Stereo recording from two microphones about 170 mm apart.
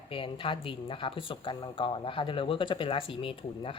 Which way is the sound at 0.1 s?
30° left (ahead or behind).